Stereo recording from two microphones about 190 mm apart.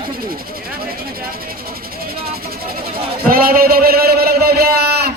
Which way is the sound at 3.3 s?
50° right (ahead or behind).